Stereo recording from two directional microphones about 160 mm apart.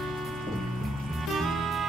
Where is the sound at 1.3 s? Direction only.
Centre (ahead or behind).